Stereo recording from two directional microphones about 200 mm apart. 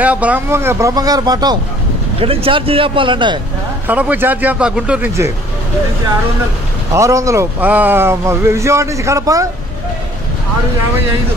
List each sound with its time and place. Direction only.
0.0 s speech: 5° right (ahead or behind); by 3.3 s 25° right (ahead or behind)
3.8 s speech: 5° right (ahead or behind)
6.9 s speech: 15° right (ahead or behind)